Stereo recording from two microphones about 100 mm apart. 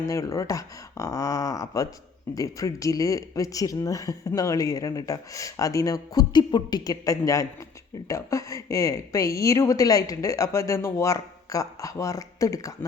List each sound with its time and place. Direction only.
0.0 s speech: 30° left (ahead or behind)